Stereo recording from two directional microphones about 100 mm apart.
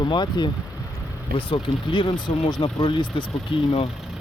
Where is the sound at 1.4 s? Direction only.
60° left (ahead or behind).